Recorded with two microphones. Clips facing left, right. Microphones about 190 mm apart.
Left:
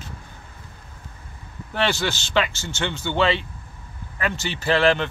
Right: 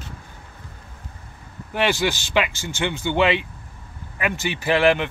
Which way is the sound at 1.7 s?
15° right (ahead or behind).